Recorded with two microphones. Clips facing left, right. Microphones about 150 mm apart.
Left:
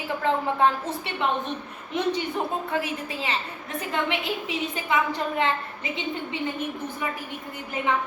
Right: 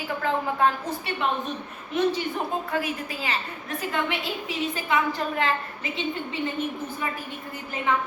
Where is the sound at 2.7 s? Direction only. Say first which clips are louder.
Even; 25° left (ahead or behind).